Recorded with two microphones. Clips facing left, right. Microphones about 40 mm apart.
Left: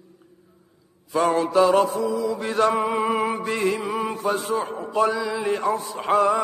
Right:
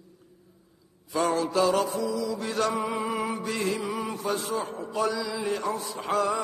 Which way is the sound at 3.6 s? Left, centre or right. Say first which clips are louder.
Left 5 dB; left.